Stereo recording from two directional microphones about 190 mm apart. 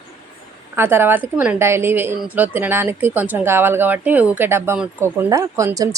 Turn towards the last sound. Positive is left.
turn(degrees=-15)  # may be behind; listen again after turning